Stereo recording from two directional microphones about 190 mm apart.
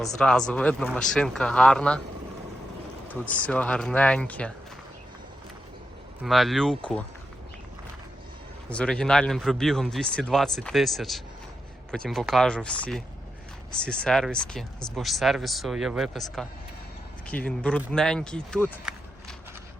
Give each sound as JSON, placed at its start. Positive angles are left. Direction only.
{"t": 0.0, "sound": "a man's voice", "side_deg": 5}
{"t": 3.1, "sound": "speech", "side_deg": 5}
{"t": 6.2, "sound": "a man's voice", "side_deg": 0}
{"t": 8.7, "sound": "a man's voice", "side_deg": 5}